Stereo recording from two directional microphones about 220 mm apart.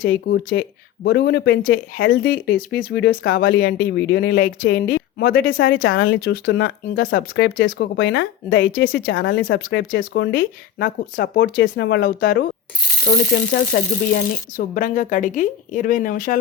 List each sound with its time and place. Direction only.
0.0 s speech: 45° left (ahead or behind); by 6.1 s 65° left (ahead or behind)
6.1 s speech: 45° left (ahead or behind)
14.1 s speech: 40° left (ahead or behind)